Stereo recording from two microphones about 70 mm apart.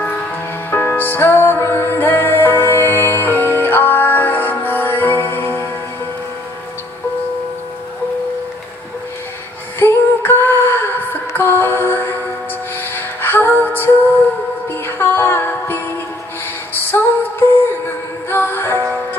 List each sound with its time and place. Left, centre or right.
0.7 s music: left
9.8 s a sound: left
11.3 s music: left
16.7 s female singing: left
18.3 s music: left